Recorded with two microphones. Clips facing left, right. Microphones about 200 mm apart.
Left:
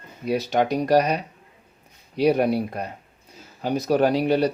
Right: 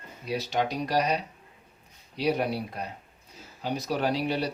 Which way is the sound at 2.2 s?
50° left (ahead or behind).